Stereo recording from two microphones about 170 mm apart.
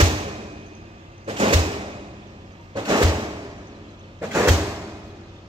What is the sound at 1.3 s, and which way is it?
Door, 30° right (ahead or behind).